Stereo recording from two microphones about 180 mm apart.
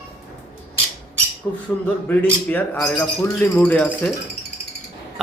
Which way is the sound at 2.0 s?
10° left (ahead or behind).